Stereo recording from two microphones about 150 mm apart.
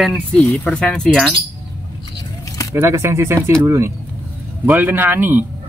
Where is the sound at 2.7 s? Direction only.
20° right (ahead or behind).